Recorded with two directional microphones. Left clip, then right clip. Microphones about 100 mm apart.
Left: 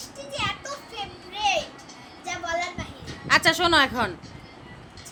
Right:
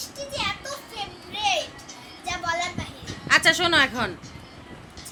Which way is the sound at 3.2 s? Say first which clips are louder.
Right 1 dB; 20° left (ahead or behind).